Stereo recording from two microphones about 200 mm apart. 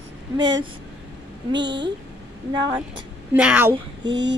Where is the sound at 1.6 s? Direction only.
60° right (ahead or behind).